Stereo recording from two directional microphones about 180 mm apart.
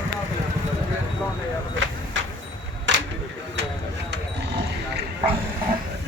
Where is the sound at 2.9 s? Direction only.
90° right.